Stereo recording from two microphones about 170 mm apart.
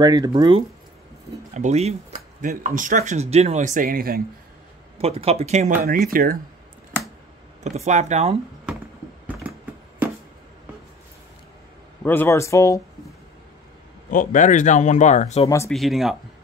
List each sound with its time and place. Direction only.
0.0 s speech: 20° right (ahead or behind)
1.5 s speech: 40° right (ahead or behind)
2.1 s a sound: 55° right (ahead or behind)
2.6 s speech: 50° right (ahead or behind)
4.9 s speech: 35° right (ahead or behind)
5.9 s speech: 60° right (ahead or behind)
7.6 s speech: 45° right (ahead or behind)
12.0 s speech: 10° left (ahead or behind)
14.1 s speech: 50° left (ahead or behind)
15.4 s speech: 20° left (ahead or behind)
15.7 s speech: centre (ahead or behind)